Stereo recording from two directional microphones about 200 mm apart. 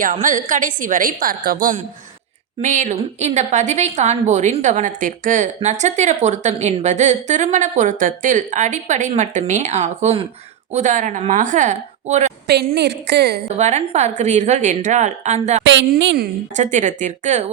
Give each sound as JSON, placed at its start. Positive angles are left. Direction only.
{"t": 0.0, "sound": "a woman's voice", "side_deg": -40}
{"t": 12.5, "sound": "a woman's voice", "side_deg": -55}
{"t": 13.6, "sound": "a woman's voice", "side_deg": -35}
{"t": 15.6, "sound": "a woman's voice", "side_deg": -65}
{"t": 16.6, "sound": "a woman's voice", "side_deg": -40}